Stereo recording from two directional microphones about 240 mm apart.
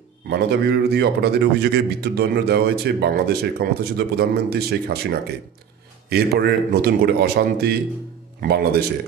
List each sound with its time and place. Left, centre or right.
0.3 s a man's voice: right